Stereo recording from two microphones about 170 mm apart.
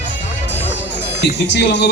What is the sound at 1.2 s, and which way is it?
Speech, 90° left.